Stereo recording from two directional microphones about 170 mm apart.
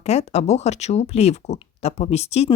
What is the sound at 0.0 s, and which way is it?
Speech, 40° left (ahead or behind).